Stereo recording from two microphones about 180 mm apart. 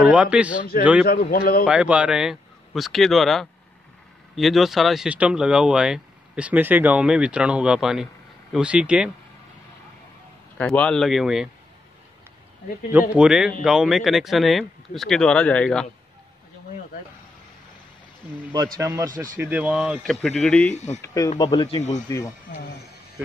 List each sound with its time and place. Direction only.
0.0 s a man's voice: 5° right (ahead or behind)
1.0 s a man's voice: 55° left (ahead or behind)
1.7 s speech: 5° right (ahead or behind)
10.6 s speech: 5° left (ahead or behind)
13.1 s speech: 5° right (ahead or behind)
18.5 s a man's voice: 20° right (ahead or behind); by 20.7 s 5° left (ahead or behind)
20.7 s speech: 40° left (ahead or behind)
21.0 s speech: 20° left (ahead or behind)